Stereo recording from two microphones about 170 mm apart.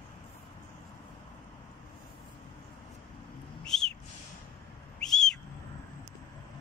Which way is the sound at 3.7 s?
5° left (ahead or behind).